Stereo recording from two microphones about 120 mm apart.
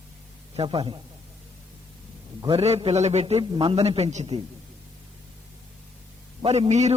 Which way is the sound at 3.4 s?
45° right (ahead or behind).